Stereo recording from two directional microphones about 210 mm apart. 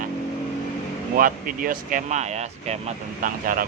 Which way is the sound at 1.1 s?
40° right (ahead or behind).